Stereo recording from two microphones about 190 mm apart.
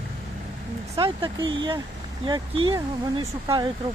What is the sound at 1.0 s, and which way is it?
Speech, 25° right (ahead or behind).